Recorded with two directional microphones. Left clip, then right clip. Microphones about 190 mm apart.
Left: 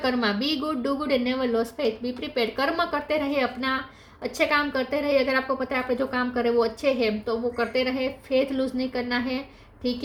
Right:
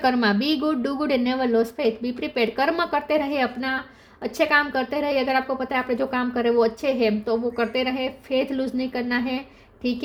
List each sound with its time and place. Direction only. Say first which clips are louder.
0.0 s a woman's voice: right 4 dB; 40° right (ahead or behind)